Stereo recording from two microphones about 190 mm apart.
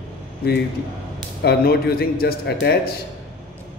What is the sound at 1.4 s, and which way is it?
Speech, 55° left (ahead or behind).